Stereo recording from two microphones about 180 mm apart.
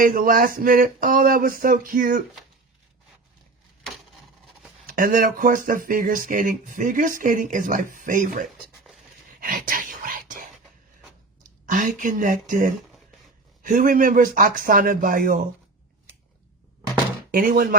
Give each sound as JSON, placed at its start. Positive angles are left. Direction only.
{"t": 0.0, "sound": "speech", "side_deg": -50}
{"t": 4.9, "sound": "speech", "side_deg": -50}
{"t": 9.4, "sound": "whispering", "side_deg": -50}
{"t": 11.6, "sound": "speech", "side_deg": -45}
{"t": 17.3, "sound": "speech", "side_deg": -55}